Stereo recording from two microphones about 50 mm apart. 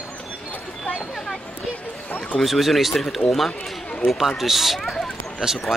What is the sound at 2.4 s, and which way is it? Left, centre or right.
Speech, centre.